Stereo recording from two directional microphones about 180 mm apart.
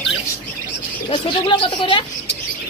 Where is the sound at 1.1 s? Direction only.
25° left (ahead or behind).